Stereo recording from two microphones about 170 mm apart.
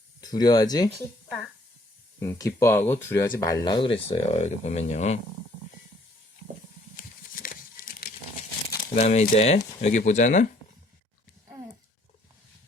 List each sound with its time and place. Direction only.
0.2 s speech: 25° left (ahead or behind)
2.1 s speech: 20° left (ahead or behind); by 5.2 s 40° left (ahead or behind)
7.4 s a sound: 55° left (ahead or behind)
9.0 s speech: 40° left (ahead or behind)